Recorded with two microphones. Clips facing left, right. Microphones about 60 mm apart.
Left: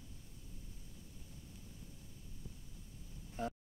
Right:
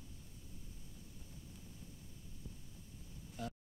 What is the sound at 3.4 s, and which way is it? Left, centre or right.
Music, left.